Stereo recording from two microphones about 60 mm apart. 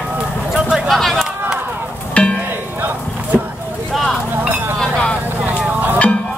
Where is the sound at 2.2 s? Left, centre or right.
Left.